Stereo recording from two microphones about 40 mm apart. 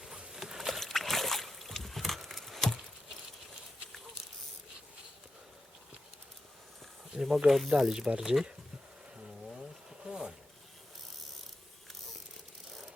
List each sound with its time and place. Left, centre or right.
0.3 s a sound: centre
0.7 s a sound: centre
1.7 s patter: centre
7.2 s speech: centre
7.8 s speech: centre
10.0 s zipper: right